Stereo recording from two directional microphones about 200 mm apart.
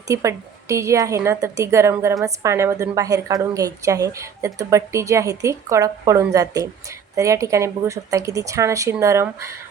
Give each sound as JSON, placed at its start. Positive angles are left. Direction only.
{"t": 0.1, "sound": "a woman's voice", "side_deg": -15}